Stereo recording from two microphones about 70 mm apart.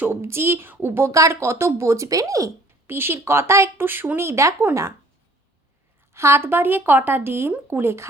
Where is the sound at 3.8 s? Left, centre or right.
Right.